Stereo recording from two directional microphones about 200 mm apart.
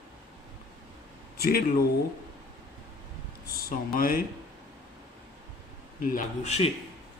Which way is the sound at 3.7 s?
45° left (ahead or behind).